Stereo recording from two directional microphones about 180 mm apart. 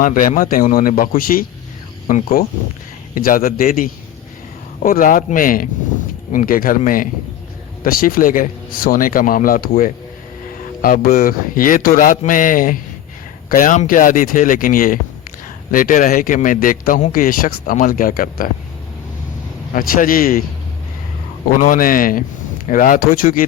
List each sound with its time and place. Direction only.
0.0 s a man's voice: 50° left (ahead or behind)
19.7 s a man's voice: 50° left (ahead or behind)
21.5 s a man's voice: 50° left (ahead or behind)